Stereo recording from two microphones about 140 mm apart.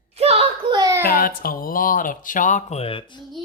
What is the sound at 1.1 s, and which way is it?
Speech, 90° left.